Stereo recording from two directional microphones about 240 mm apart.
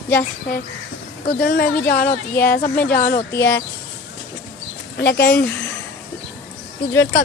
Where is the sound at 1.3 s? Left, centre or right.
Left.